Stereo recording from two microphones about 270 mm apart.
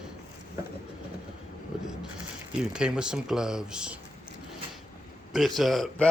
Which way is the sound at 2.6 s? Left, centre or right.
Centre.